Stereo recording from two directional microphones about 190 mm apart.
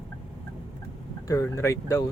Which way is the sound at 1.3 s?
15° left (ahead or behind).